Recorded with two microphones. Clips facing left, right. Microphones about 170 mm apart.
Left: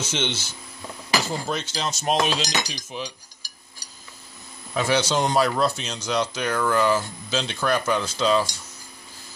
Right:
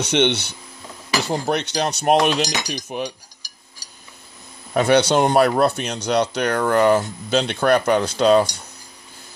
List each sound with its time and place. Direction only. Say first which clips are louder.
0.0 s speech: right 9 dB; 65° right (ahead or behind)
2.7 s cutlery: right 7 dB; 55° right (ahead or behind)
4.7 s speech: right 7 dB; 60° right (ahead or behind)